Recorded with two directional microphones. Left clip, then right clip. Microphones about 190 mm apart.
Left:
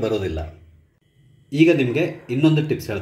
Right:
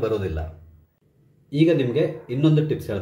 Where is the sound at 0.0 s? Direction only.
20° left (ahead or behind).